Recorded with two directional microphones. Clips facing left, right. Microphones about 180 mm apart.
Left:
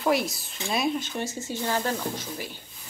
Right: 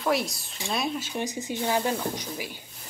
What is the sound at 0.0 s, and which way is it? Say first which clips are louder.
A woman's voice: left 2 dB; centre (ahead or behind).